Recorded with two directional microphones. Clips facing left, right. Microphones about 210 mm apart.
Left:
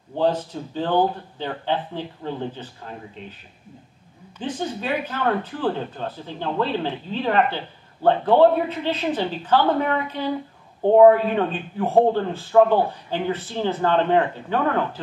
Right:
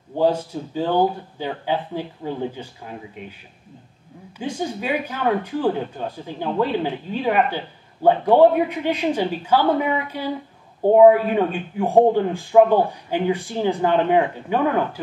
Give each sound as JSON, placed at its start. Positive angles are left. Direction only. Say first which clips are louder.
{"t": 0.2, "sound": "speech", "louder": "right 2 dB", "side_deg": -10}
{"t": 4.4, "sound": "speech", "louder": "right 1 dB", "side_deg": -10}